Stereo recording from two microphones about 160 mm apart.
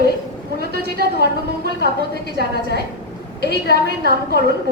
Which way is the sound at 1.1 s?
75° right (ahead or behind).